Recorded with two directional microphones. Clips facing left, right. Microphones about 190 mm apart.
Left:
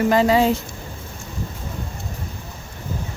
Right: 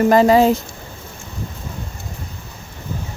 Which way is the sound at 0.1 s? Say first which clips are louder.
Right 4 dB; 45° right (ahead or behind).